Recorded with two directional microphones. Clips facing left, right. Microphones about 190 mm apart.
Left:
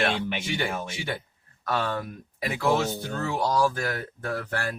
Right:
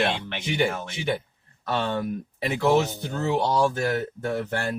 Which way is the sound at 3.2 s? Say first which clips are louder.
Right 3 dB; 25° right (ahead or behind).